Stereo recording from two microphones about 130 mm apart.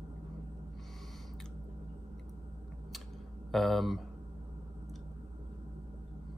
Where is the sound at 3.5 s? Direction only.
Centre (ahead or behind).